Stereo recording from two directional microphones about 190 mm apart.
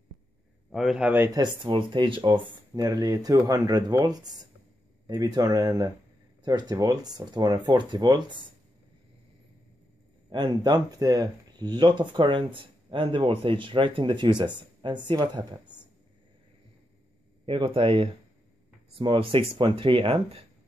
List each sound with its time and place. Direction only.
0.7 s speech: centre (ahead or behind); by 8.4 s 25° right (ahead or behind)
10.3 s speech: 20° right (ahead or behind)
17.5 s speech: 25° right (ahead or behind)